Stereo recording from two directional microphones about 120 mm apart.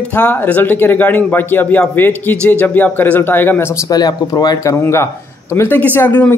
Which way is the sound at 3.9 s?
35° left (ahead or behind).